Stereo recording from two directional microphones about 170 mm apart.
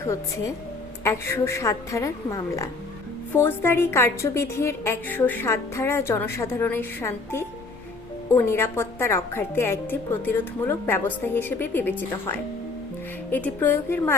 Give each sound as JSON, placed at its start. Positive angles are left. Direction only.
{"t": 1.0, "sound": "a woman's voice", "side_deg": 15}